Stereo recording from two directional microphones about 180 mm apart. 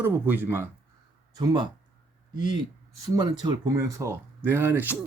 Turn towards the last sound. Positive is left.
turn(degrees=-10)  # may be behind; listen again after turning